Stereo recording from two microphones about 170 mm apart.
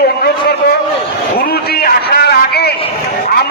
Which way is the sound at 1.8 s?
70° left (ahead or behind).